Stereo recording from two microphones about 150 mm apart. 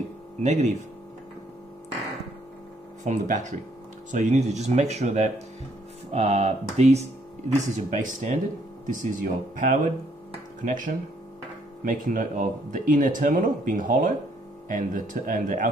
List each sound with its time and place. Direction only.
0.4 s speech: 50° right (ahead or behind)
3.0 s speech: 55° right (ahead or behind)